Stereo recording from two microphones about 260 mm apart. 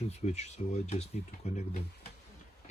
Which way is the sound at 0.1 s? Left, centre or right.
Left.